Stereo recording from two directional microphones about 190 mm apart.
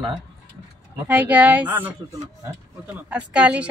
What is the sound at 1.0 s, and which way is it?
Speech, 10° right (ahead or behind).